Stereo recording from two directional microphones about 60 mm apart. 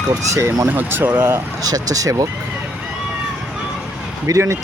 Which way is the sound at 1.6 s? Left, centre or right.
Right.